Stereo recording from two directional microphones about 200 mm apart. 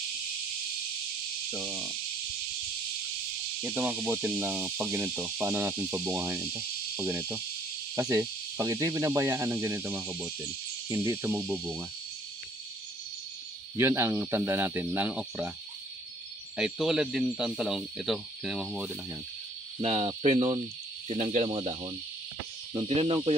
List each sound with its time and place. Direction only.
1.5 s speech: 5° right (ahead or behind)
3.6 s speech: 10° right (ahead or behind)
13.7 s speech: 10° right (ahead or behind)
16.5 s speech: 5° right (ahead or behind)
19.8 s speech: 30° right (ahead or behind)